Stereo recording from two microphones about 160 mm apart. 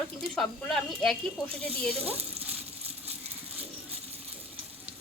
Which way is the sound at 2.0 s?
40° right (ahead or behind).